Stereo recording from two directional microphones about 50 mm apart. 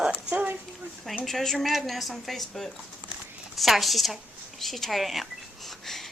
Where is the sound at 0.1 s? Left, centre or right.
Right.